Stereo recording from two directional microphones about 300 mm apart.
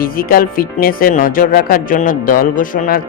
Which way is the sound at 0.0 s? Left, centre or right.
Left.